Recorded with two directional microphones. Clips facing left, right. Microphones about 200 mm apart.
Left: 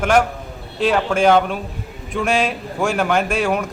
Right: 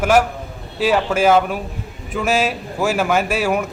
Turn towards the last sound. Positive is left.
turn(degrees=-5)  # may be behind; listen again after turning